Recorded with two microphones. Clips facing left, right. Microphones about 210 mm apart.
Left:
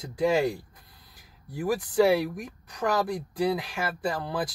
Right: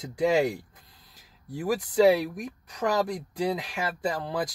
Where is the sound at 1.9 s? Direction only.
20° right (ahead or behind).